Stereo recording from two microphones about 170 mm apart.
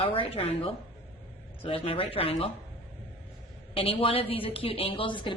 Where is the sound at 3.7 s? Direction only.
35° left (ahead or behind).